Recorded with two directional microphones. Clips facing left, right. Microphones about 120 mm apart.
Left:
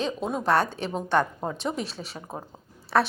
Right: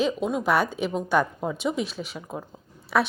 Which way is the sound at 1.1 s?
5° right (ahead or behind).